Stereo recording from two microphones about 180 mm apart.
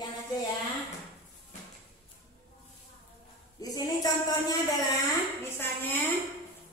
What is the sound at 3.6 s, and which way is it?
Music, 20° left (ahead or behind).